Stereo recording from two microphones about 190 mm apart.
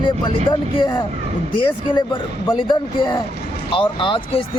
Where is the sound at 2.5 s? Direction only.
25° left (ahead or behind).